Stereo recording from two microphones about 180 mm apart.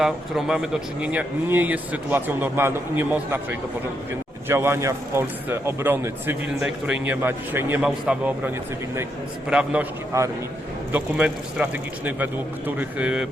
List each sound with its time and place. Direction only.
0.0 s a man's voice: 5° right (ahead or behind)
9.5 s a man's voice: 5° right (ahead or behind)
10.1 s speech: 15° right (ahead or behind)